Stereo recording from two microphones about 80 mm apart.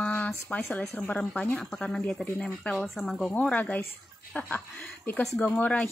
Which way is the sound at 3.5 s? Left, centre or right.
Centre.